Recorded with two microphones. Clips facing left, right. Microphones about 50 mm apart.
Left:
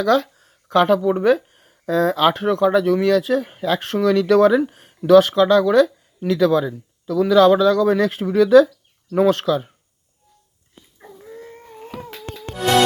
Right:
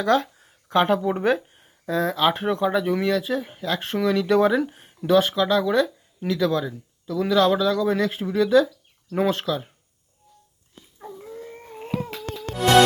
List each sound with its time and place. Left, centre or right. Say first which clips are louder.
0.0 s speech: left 3 dB; right
1.6 s speech: left 6 dB; centre
2.3 s speech: left 5 dB; centre
3.8 s speech: left 4 dB; centre